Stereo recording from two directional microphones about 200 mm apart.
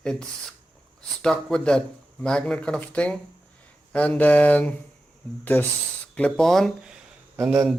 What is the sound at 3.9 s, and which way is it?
Mantra, 5° left (ahead or behind).